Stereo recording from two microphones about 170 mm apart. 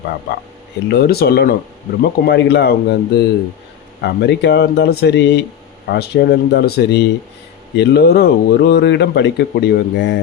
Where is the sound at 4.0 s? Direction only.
85° left.